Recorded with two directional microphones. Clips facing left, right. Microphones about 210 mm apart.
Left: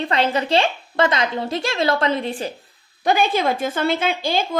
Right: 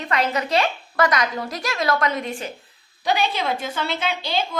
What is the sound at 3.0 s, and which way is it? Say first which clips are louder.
A woman's voice: left 4 dB; 50° left (ahead or behind).